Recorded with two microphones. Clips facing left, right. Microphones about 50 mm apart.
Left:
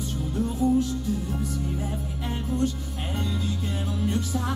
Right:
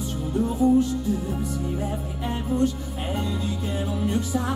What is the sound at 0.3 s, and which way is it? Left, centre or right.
Music, centre.